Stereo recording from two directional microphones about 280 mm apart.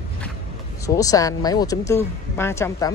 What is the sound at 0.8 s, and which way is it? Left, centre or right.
Speech, centre.